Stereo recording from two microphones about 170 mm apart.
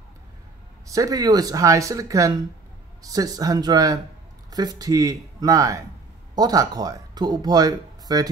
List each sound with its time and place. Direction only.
0.8 s speech: 20° right (ahead or behind)